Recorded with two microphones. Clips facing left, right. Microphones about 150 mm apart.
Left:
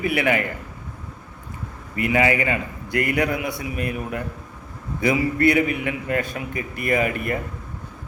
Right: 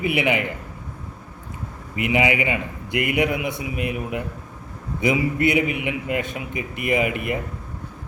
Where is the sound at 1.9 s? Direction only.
15° right (ahead or behind).